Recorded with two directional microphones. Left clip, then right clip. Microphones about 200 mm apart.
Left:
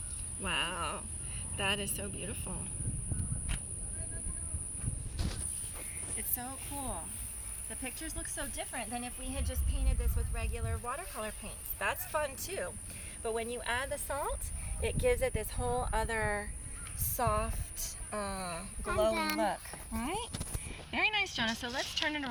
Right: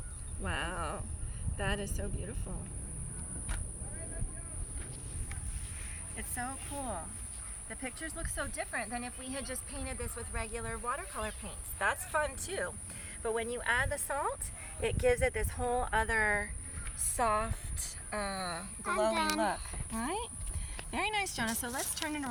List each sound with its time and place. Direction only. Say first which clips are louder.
0.4 s speech: left 3 dB; 5° left (ahead or behind)
6.1 s speech: right 5 dB; centre (ahead or behind)
17.2 s a woman's voice: right 2 dB; 25° left (ahead or behind)
19.9 s speech: right 1 dB; 15° left (ahead or behind)
20.9 s speech: left 3 dB; 5° right (ahead or behind)